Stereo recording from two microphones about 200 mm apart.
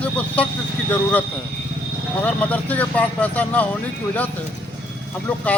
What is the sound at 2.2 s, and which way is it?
Speech, 5° left (ahead or behind).